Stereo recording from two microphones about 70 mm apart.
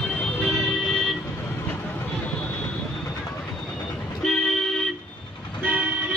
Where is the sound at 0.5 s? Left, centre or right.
Centre.